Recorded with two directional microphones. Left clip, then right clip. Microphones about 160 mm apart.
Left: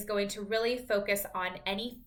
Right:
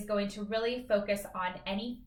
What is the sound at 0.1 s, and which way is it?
A woman's voice, 15° left (ahead or behind).